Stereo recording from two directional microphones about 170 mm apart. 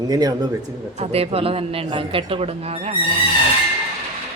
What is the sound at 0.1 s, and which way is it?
Speech, 25° right (ahead or behind).